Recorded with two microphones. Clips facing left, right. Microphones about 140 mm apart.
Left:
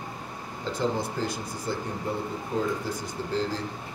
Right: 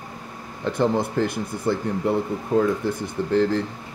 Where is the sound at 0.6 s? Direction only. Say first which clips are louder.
Right 7 dB; 60° right (ahead or behind).